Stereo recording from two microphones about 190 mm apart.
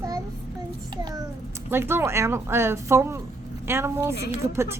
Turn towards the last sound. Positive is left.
turn(degrees=-15)  # may be behind; listen again after turning